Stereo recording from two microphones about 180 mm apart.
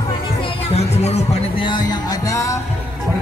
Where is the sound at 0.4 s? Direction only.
35° left (ahead or behind); by 2.6 s 20° left (ahead or behind).